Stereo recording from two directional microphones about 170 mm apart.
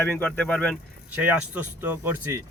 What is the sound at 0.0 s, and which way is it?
Speech, 10° left (ahead or behind).